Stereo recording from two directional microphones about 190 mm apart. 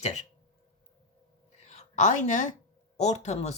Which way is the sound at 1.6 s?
40° left (ahead or behind).